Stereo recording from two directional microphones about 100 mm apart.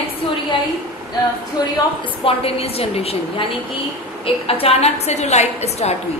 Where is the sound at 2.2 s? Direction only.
75° left (ahead or behind).